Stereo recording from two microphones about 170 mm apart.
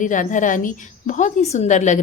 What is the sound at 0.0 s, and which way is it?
A woman's voice, 50° left (ahead or behind).